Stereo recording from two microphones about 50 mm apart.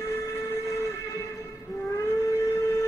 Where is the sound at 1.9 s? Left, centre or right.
Left.